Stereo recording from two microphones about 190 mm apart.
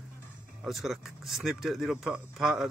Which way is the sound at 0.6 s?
Centre (ahead or behind).